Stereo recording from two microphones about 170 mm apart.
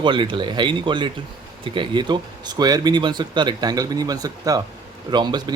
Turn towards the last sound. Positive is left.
turn(degrees=-25)  # may be behind; listen again after turning